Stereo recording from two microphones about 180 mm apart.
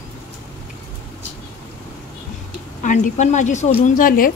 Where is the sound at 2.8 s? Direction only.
45° left (ahead or behind).